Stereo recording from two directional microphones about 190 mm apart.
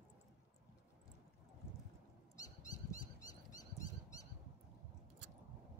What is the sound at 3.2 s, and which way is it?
Dog, 20° left (ahead or behind).